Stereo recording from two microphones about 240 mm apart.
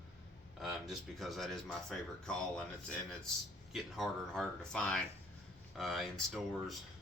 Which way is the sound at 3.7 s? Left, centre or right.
Centre.